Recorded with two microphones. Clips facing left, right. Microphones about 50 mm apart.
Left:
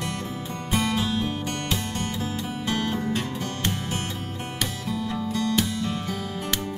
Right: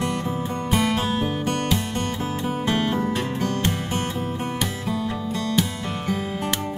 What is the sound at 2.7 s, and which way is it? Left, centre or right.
Music, right.